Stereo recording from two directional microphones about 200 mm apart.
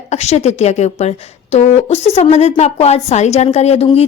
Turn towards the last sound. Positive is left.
turn(degrees=30)  # may be behind; listen again after turning